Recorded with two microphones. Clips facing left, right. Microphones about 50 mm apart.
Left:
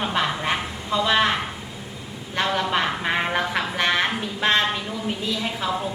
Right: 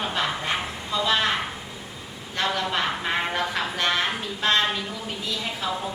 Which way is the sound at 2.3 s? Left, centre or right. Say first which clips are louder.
Left 3 dB; left.